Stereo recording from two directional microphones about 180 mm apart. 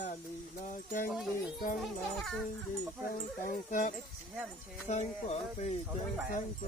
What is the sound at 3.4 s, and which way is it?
Speech, 50° left (ahead or behind).